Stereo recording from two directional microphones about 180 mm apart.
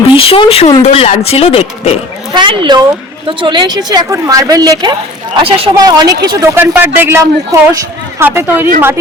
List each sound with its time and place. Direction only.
0.2 s speech: 30° left (ahead or behind)
2.3 s a woman's voice: 25° right (ahead or behind)